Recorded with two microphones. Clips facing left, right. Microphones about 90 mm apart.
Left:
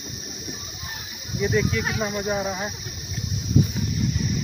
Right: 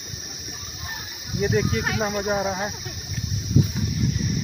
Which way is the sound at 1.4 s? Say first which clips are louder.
Even; 35° right (ahead or behind).